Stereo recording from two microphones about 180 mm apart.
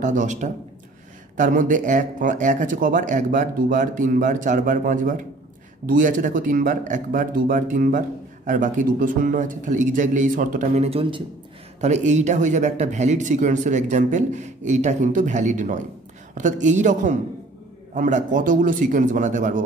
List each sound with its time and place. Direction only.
0.0 s speech: 45° right (ahead or behind)
11.8 s speech: 40° right (ahead or behind)